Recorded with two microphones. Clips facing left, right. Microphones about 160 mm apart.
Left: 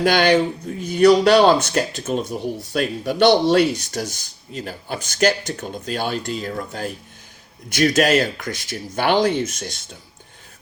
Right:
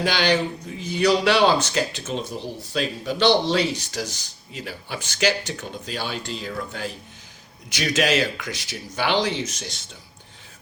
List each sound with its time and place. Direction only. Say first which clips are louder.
0.0 s speech: left 5 dB; 50° left (ahead or behind)